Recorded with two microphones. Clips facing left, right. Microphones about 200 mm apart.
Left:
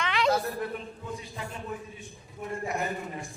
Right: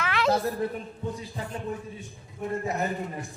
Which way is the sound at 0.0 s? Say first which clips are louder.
Right 1 dB; centre (ahead or behind).